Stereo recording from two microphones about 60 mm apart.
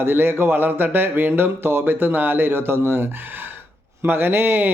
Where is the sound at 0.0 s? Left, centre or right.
Right.